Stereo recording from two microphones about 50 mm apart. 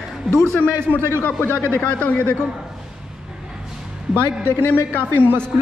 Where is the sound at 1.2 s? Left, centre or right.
Left.